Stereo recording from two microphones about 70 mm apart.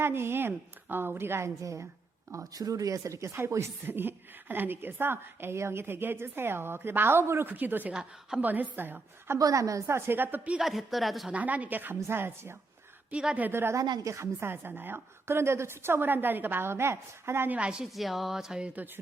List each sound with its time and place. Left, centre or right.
0.0 s a woman's voice: right
1.6 s a woman's voice: right
9.4 s a woman's voice: right
10.6 s music: centre
11.3 s a woman's voice: right
13.1 s a woman's voice: centre
13.5 s a woman's voice: right
14.0 s a woman's voice: right
14.3 s a woman's voice: right
17.5 s a woman's voice: centre
17.9 s music: centre